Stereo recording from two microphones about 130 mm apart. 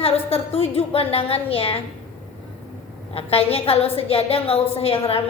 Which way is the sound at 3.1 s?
50° left (ahead or behind).